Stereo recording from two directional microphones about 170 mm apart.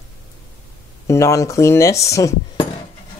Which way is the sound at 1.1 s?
20° left (ahead or behind).